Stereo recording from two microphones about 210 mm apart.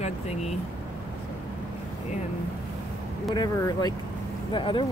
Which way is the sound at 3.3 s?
20° left (ahead or behind).